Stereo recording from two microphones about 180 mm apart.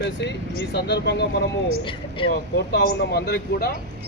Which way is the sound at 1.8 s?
30° left (ahead or behind).